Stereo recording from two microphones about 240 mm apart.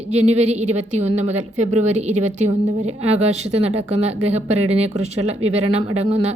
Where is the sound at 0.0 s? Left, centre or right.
Right.